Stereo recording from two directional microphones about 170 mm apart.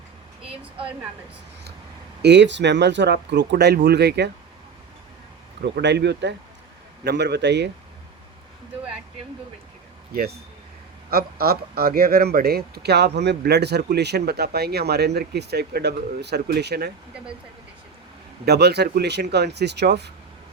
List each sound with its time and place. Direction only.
2.2 s speech: 90° right
5.6 s speech: 85° right
10.1 s a man's voice: 70° right (ahead or behind)
18.4 s a man's voice: 75° right (ahead or behind)